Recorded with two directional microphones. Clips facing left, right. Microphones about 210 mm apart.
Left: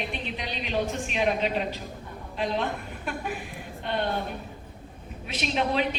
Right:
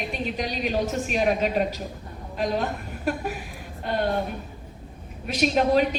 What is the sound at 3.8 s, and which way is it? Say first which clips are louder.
Speech: right 3 dB; 45° right (ahead or behind).